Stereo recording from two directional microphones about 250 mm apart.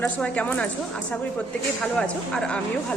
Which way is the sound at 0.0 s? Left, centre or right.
Centre.